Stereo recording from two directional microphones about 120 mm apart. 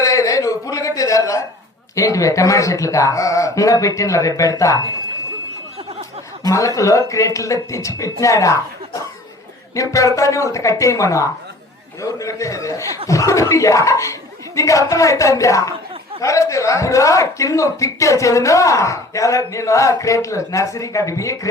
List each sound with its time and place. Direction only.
0.0 s a sound: 25° left (ahead or behind)
2.0 s a man's voice: 25° left (ahead or behind)
6.4 s a man's voice: 30° left (ahead or behind)
9.7 s a man's voice: 25° left (ahead or behind)